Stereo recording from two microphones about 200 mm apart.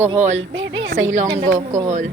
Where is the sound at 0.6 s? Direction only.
70° right (ahead or behind).